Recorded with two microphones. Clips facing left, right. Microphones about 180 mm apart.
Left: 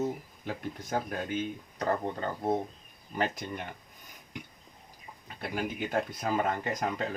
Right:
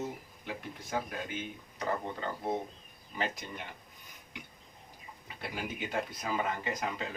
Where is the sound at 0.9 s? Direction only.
40° left (ahead or behind).